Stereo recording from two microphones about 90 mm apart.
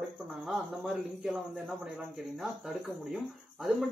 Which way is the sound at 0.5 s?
5° right (ahead or behind).